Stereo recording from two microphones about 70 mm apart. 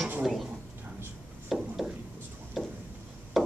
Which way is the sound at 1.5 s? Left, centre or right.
Centre.